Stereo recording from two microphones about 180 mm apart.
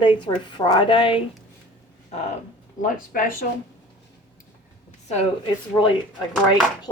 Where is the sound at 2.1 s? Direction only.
40° left (ahead or behind).